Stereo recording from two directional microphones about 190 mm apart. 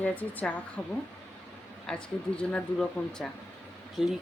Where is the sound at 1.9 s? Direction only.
5° left (ahead or behind).